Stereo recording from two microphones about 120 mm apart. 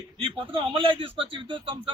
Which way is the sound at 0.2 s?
45° right (ahead or behind).